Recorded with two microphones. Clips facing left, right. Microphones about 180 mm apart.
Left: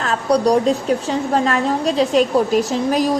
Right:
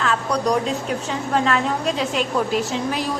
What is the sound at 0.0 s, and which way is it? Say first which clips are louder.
A woman's voice: left 5 dB; 35° left (ahead or behind).